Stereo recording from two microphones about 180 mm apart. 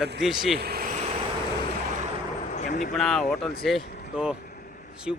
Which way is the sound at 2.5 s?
45° left (ahead or behind).